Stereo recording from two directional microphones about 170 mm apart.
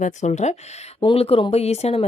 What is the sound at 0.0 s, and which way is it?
Speech, 45° left (ahead or behind).